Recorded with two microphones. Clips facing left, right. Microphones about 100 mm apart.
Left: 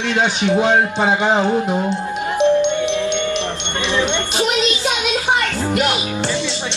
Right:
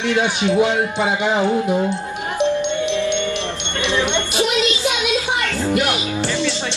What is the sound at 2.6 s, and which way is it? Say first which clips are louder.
Music: left 2 dB; 20° left (ahead or behind).